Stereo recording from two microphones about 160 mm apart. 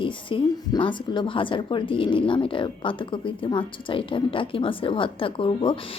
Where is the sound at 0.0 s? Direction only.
30° left (ahead or behind).